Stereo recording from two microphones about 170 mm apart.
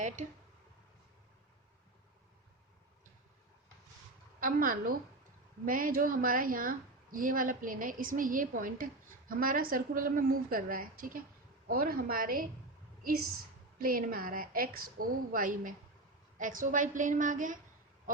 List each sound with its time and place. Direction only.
4.4 s a woman's voice: 55° right (ahead or behind)
13.7 s a woman's voice: 55° right (ahead or behind)